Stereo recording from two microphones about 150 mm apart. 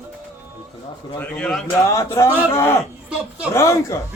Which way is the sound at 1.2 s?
5° left (ahead or behind).